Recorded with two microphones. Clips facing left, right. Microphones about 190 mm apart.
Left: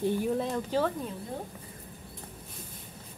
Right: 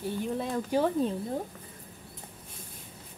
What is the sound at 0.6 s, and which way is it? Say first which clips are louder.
Speech: right 4 dB; 15° right (ahead or behind).